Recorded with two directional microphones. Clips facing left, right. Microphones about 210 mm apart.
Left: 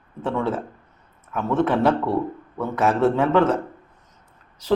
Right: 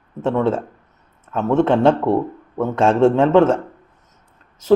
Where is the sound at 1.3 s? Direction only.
25° right (ahead or behind).